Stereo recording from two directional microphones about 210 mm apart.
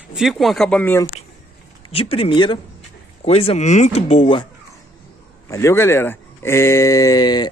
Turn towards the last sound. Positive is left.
turn(degrees=20)  # may be behind; listen again after turning